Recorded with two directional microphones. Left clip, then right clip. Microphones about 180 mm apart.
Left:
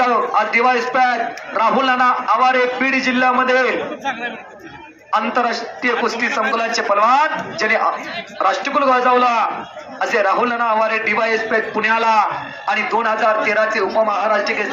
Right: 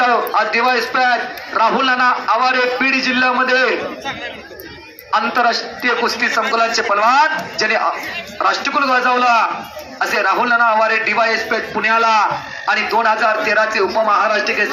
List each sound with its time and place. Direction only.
0.0 s a man's voice: 30° left (ahead or behind)
5.1 s a man's voice: 30° left (ahead or behind)